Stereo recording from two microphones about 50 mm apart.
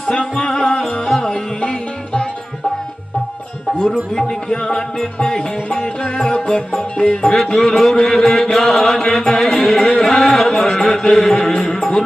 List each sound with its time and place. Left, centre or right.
0.5 s music: centre
1.6 s music: centre
3.8 s music: centre
7.3 s mantra: centre